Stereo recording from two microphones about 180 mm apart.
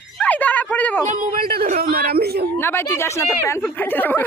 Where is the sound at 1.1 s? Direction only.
50° right (ahead or behind).